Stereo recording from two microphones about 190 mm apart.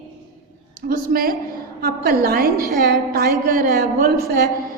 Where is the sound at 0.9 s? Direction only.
50° right (ahead or behind).